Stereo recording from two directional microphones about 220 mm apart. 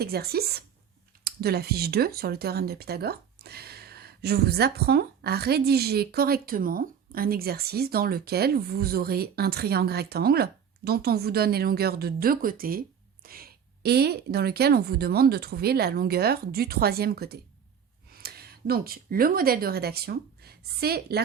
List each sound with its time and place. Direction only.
0.0 s speech: 45° right (ahead or behind)